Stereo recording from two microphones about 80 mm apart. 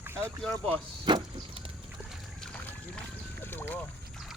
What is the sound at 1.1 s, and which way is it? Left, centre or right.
Vehicle, right.